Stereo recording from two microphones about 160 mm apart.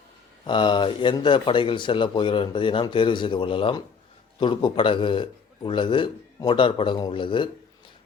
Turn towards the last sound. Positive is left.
turn(degrees=30)  # may be behind; listen again after turning